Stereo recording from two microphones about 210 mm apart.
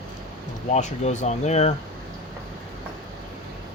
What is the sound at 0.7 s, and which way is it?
Speech, 35° left (ahead or behind).